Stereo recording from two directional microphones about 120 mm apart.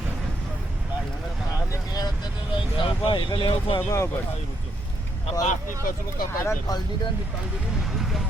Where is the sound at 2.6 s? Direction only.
45° left (ahead or behind).